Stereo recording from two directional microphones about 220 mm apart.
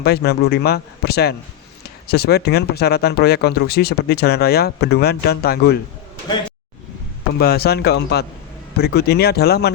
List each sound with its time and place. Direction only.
0.0 s speech: 45° left (ahead or behind)
7.3 s speech: 45° left (ahead or behind)